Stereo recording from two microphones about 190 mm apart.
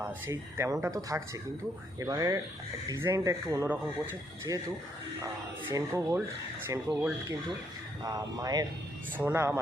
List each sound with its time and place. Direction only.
0.0 s speech: 15° right (ahead or behind)
8.0 s speech: 20° right (ahead or behind)